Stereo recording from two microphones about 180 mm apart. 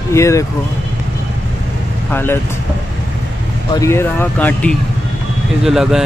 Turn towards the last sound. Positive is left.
turn(degrees=0)  # may be behind; listen again after turning